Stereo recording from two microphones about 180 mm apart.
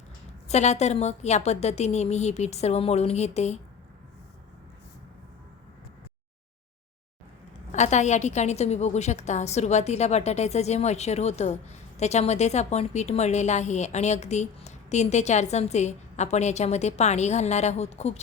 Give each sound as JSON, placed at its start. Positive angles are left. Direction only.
{"t": 0.4, "sound": "a woman's voice", "side_deg": 40}
{"t": 7.7, "sound": "a woman's voice", "side_deg": 40}